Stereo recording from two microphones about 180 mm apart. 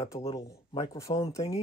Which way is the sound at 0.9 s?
15° left (ahead or behind).